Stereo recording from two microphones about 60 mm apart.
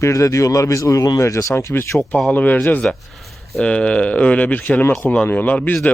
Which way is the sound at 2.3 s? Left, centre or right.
Left.